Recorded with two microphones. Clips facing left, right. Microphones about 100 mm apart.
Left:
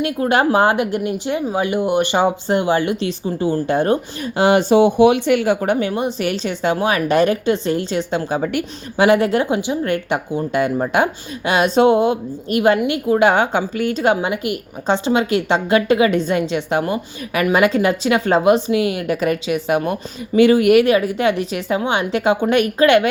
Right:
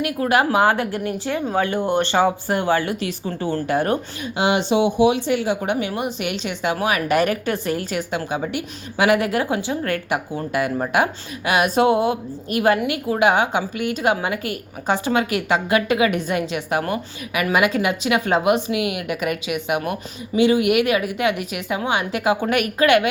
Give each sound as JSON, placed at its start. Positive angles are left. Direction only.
{"t": 0.0, "sound": "speech", "side_deg": 30}
{"t": 0.7, "sound": "speech", "side_deg": 20}
{"t": 3.7, "sound": "speech", "side_deg": 25}
{"t": 4.2, "sound": "speech", "side_deg": 45}
{"t": 5.7, "sound": "speech", "side_deg": 30}
{"t": 20.3, "sound": "speech", "side_deg": 50}